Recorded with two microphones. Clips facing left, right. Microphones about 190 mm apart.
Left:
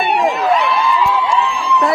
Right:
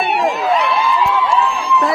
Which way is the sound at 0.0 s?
Centre (ahead or behind).